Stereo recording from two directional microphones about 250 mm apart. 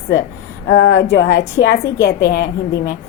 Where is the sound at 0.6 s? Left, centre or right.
Left.